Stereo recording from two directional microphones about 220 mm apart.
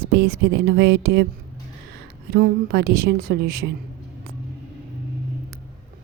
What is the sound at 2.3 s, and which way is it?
A woman's voice, 45° right (ahead or behind).